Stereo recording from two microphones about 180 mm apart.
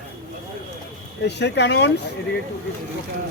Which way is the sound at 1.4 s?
70° left (ahead or behind).